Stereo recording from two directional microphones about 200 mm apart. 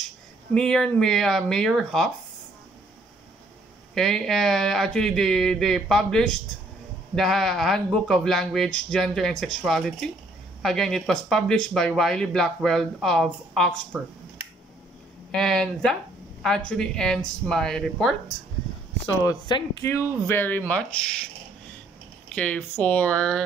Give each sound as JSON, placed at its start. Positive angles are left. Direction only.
{"t": 0.6, "sound": "speech", "side_deg": 5}
{"t": 3.9, "sound": "speech", "side_deg": 0}
{"t": 15.3, "sound": "speech", "side_deg": 5}
{"t": 19.2, "sound": "speech", "side_deg": 20}
{"t": 22.3, "sound": "speech", "side_deg": 5}